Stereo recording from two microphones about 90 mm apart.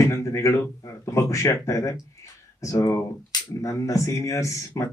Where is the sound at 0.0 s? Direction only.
35° left (ahead or behind).